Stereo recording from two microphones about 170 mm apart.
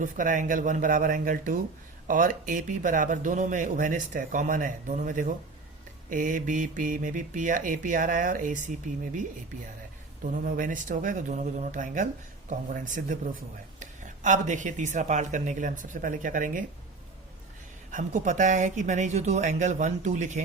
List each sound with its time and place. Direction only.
0.0 s speech: 50° right (ahead or behind)
10.3 s speech: 55° right (ahead or behind)
17.9 s speech: 45° right (ahead or behind)